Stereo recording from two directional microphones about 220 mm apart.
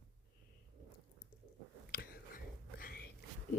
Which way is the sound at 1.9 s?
40° left (ahead or behind).